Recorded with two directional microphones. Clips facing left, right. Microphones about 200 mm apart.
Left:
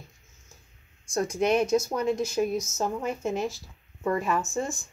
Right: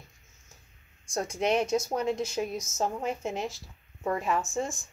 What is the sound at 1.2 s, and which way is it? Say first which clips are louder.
Speech: left 3 dB; 25° right (ahead or behind).